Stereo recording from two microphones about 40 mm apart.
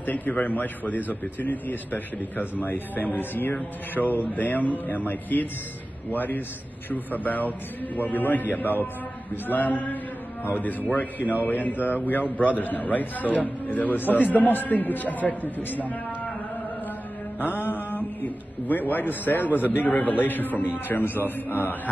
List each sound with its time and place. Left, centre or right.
0.0 s a man's voice: left
17.6 s a man's voice: left
19.9 s a man's voice: left